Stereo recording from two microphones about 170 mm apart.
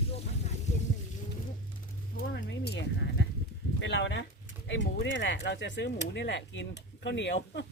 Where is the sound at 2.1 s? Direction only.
80° left.